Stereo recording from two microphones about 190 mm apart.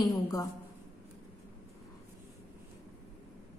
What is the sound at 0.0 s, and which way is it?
Speech, 20° left (ahead or behind).